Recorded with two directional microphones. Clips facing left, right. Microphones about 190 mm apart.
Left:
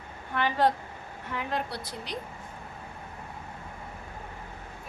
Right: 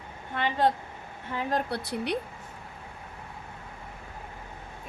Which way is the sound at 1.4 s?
40° right (ahead or behind).